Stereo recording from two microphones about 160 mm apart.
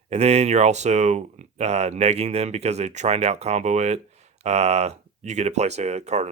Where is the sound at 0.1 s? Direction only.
40° right (ahead or behind).